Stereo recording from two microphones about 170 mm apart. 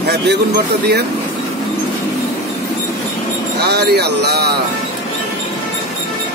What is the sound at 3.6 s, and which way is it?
Speech, 75° right (ahead or behind).